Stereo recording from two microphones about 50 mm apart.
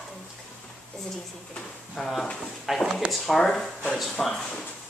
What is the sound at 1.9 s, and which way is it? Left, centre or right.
Speech, centre.